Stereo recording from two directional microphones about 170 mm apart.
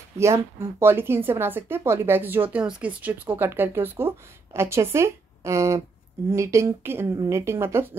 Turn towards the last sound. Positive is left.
turn(degrees=-15)  # may be behind; listen again after turning